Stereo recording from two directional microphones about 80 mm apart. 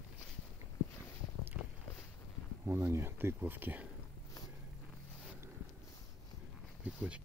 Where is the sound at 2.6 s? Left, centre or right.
Right.